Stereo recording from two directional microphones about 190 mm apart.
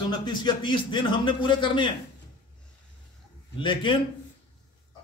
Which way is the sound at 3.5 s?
25° left (ahead or behind).